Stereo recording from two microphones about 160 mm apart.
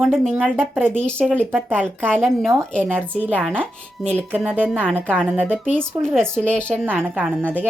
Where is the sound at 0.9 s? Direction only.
5° left (ahead or behind).